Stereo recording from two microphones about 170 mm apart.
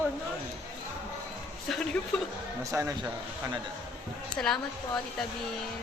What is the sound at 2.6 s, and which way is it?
Speech, 20° right (ahead or behind).